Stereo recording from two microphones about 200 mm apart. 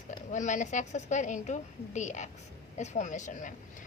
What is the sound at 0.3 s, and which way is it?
A woman's voice, 35° left (ahead or behind).